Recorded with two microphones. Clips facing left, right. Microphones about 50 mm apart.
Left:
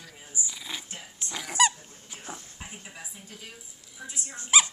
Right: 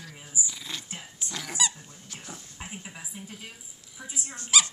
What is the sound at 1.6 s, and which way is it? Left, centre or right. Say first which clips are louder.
Speech: left 8 dB; left.